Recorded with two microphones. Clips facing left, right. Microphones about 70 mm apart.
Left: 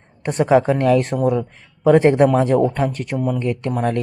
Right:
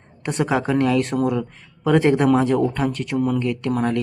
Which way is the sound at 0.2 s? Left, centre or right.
Left.